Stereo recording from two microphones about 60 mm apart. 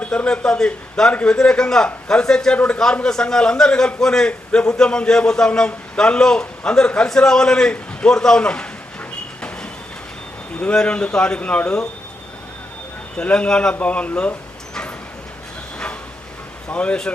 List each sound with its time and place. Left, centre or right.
0.0 s a man's voice: centre
10.6 s a man's voice: centre
13.2 s a man's voice: centre
16.6 s speech: left